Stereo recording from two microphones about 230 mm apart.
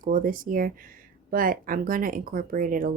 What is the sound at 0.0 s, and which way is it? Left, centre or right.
Speech, right.